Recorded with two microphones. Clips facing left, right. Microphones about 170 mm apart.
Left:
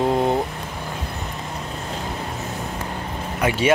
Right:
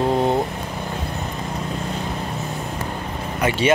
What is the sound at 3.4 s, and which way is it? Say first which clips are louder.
Speech: even; 10° left (ahead or behind).